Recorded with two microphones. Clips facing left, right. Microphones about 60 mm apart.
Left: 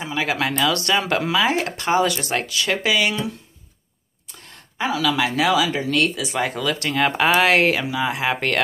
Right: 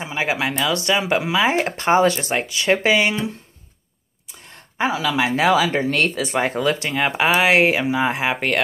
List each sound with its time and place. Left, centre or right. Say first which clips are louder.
0.0 s speech: even; right
4.5 s speech: right 2 dB; right
6.9 s speech: left 4 dB; centre
8.3 s speech: right 1 dB; centre